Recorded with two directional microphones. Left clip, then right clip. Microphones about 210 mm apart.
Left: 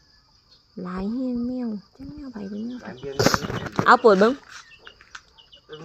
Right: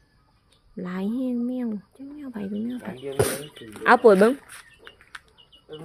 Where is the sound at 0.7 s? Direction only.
10° right (ahead or behind).